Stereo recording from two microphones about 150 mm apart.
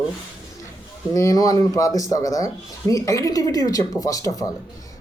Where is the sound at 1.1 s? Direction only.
20° left (ahead or behind).